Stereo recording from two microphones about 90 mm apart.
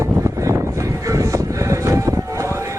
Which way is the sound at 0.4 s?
35° right (ahead or behind).